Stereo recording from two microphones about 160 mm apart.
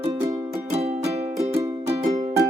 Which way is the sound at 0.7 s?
40° right (ahead or behind).